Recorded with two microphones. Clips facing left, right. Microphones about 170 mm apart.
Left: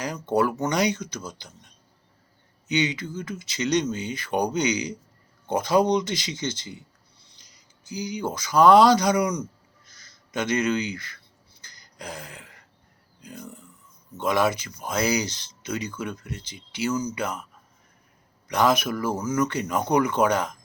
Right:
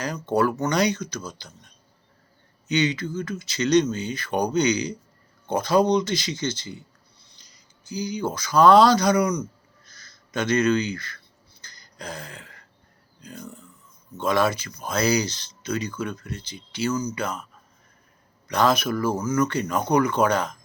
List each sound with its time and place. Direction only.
0.0 s speech: 20° left (ahead or behind)
2.6 s speech: 15° left (ahead or behind)
11.6 s a sound: 15° left (ahead or behind)
13.2 s speech: 15° left (ahead or behind)
17.0 s speech: 25° left (ahead or behind)
18.4 s speech: 15° left (ahead or behind)